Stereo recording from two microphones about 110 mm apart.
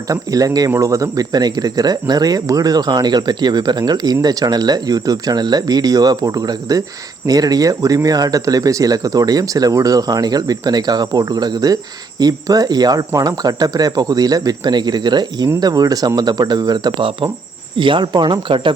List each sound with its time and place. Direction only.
0.1 s speech: 30° right (ahead or behind); by 18.7 s 50° right (ahead or behind)